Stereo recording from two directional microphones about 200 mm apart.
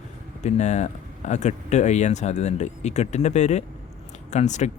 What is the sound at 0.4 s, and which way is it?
A man's voice, 35° left (ahead or behind).